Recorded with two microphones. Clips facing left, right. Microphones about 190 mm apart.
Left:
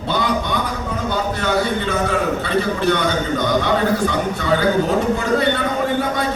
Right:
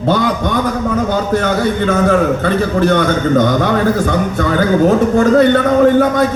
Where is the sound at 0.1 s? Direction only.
45° right (ahead or behind).